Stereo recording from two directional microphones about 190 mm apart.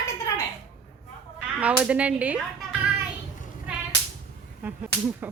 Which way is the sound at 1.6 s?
5° right (ahead or behind).